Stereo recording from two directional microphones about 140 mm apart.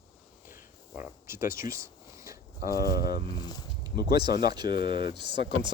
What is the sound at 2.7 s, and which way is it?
Speech, 90° left.